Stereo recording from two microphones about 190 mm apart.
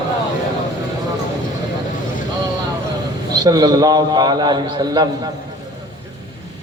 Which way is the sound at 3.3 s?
20° right (ahead or behind).